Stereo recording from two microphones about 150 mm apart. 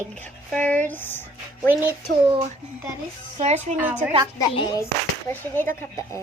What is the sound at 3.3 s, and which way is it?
Speech, 50° right (ahead or behind).